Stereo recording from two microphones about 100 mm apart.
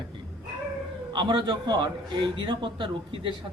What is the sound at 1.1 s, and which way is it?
A man's voice, 50° right (ahead or behind).